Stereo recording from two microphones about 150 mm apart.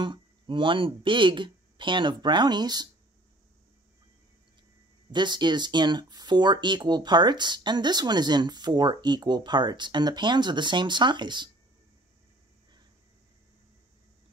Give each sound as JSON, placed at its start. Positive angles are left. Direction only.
{"t": 0.0, "sound": "speech", "side_deg": -35}
{"t": 5.1, "sound": "speech", "side_deg": -30}